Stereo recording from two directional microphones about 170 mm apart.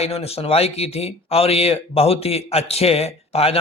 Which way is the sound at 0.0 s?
35° left (ahead or behind).